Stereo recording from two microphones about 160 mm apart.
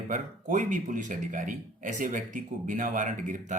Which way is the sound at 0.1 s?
55° right (ahead or behind).